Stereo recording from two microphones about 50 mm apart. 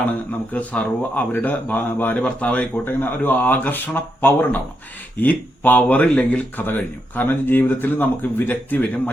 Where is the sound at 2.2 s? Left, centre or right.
Left.